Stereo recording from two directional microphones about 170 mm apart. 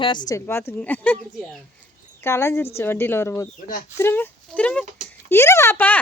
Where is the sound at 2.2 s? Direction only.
15° left (ahead or behind).